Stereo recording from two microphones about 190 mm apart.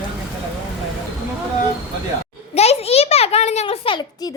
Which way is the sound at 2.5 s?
35° left (ahead or behind).